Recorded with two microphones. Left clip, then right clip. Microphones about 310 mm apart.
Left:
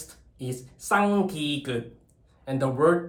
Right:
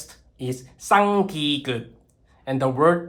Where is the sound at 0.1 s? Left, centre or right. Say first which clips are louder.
Right 6 dB; right.